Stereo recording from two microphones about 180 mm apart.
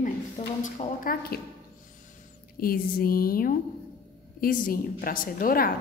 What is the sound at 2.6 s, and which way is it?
A woman's voice, 55° left (ahead or behind).